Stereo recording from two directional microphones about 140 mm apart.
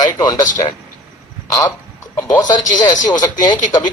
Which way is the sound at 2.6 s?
65° left (ahead or behind).